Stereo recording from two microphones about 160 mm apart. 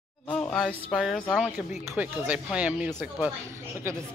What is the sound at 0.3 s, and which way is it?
A woman's voice, 5° left (ahead or behind).